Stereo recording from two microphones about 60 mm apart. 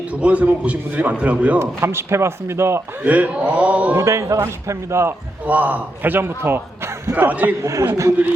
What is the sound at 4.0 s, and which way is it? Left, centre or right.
A man's voice, right.